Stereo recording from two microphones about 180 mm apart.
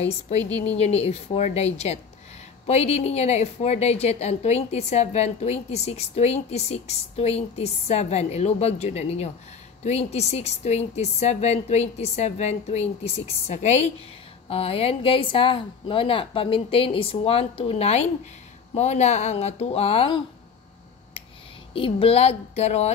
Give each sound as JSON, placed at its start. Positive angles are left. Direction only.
{"t": 0.4, "sound": "a woman's voice", "side_deg": 10}
{"t": 0.7, "sound": "a woman's voice", "side_deg": 35}
{"t": 21.7, "sound": "a woman's voice", "side_deg": 30}